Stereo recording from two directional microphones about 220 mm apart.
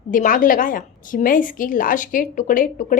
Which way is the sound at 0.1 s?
40° left (ahead or behind).